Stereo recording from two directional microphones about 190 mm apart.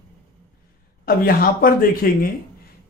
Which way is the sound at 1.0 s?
50° left (ahead or behind).